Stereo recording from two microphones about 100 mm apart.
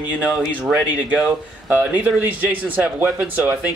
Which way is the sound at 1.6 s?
15° right (ahead or behind).